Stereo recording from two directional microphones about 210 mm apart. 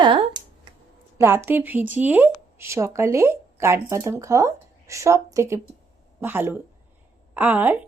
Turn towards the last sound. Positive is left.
turn(degrees=-10)  # may be behind; listen again after turning